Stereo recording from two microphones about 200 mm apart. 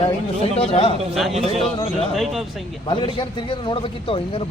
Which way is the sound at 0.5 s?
25° left (ahead or behind).